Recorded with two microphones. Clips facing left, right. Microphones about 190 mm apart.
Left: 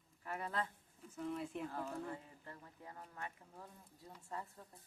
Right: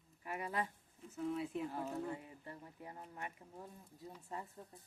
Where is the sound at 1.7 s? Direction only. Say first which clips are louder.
Right 2 dB; 15° right (ahead or behind).